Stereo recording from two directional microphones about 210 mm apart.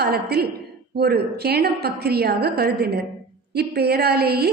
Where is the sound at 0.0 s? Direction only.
50° right (ahead or behind).